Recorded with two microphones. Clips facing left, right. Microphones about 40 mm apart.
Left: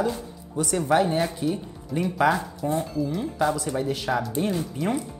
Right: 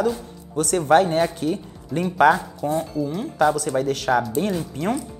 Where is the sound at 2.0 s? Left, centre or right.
Right.